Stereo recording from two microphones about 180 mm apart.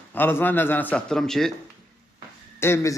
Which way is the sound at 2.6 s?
15° left (ahead or behind).